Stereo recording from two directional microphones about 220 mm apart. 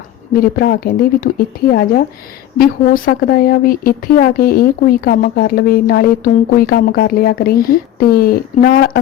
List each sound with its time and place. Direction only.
0.3 s speech: 45° left (ahead or behind)